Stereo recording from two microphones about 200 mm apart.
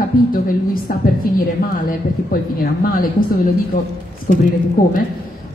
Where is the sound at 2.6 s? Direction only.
45° left (ahead or behind).